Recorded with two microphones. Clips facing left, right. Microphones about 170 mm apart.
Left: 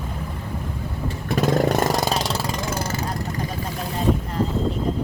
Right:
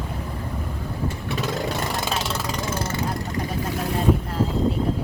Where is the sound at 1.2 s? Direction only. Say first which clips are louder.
Left 9 dB; 45° left (ahead or behind).